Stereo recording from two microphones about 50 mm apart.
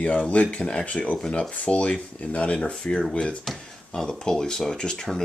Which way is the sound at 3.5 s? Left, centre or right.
Centre.